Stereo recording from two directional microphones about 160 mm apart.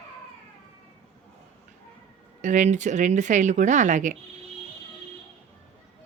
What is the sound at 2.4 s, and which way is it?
Speech, 50° right (ahead or behind).